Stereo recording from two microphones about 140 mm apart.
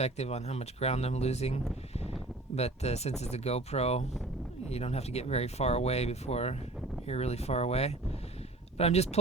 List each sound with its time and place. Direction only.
0.0 s speech: 50° left (ahead or behind)